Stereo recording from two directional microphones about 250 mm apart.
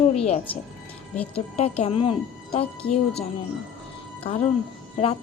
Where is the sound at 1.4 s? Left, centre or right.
Left.